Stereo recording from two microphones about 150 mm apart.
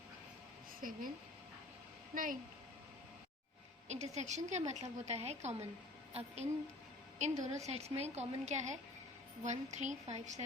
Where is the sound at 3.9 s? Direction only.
50° right (ahead or behind).